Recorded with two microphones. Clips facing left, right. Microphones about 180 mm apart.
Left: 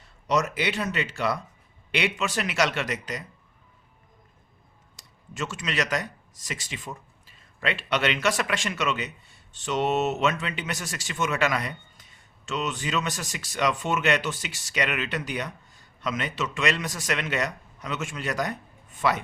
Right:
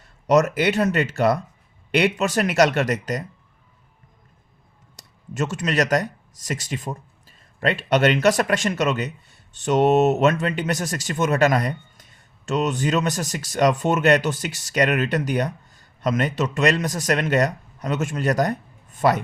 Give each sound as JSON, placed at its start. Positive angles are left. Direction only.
{"t": 0.3, "sound": "speech", "side_deg": -45}
{"t": 4.9, "sound": "a man's voice", "side_deg": -40}